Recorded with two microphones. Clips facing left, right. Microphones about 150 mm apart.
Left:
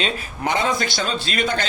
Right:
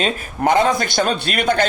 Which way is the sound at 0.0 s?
50° right (ahead or behind).